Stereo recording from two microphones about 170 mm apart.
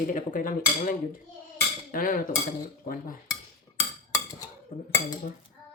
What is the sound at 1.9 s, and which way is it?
Dishes, 55° left (ahead or behind).